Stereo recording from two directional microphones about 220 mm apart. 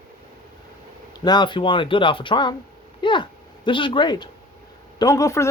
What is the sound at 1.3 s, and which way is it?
Speech, 20° left (ahead or behind).